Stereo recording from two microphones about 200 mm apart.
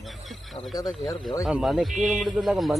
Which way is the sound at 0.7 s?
15° left (ahead or behind).